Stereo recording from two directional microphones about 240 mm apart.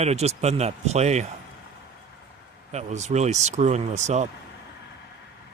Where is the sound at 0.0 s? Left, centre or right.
Right.